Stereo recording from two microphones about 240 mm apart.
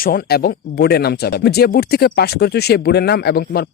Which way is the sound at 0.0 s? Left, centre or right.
Left.